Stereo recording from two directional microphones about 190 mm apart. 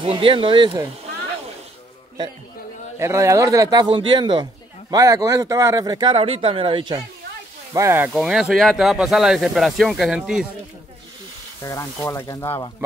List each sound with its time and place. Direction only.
0.0 s speech: 25° right (ahead or behind)
3.0 s speech: 15° right (ahead or behind)
7.7 s speech: 15° right (ahead or behind)
8.1 s speech: 5° right (ahead or behind)
11.6 s speech: 15° left (ahead or behind)